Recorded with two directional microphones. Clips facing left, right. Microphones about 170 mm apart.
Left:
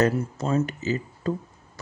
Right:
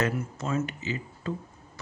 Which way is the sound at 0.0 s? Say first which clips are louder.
Left 6 dB; 35° left (ahead or behind).